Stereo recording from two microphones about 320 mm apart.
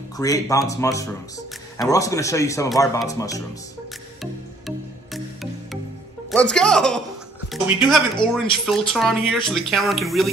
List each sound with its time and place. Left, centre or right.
0.2 s a man's voice: centre
4.2 s music: centre
6.3 s speech: centre
8.2 s a man's voice: centre
8.6 s speech: centre